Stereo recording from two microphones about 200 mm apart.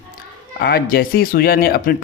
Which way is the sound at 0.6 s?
50° left (ahead or behind).